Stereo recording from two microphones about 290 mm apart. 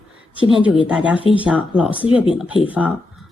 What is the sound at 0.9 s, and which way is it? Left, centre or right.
Speech, centre.